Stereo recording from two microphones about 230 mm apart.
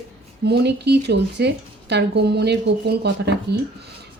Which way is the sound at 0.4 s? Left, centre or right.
Right.